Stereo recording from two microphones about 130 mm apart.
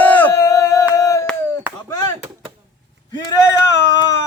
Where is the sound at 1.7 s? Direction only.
10° right (ahead or behind).